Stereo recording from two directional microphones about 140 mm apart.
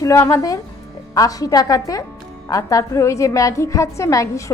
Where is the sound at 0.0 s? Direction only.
25° left (ahead or behind).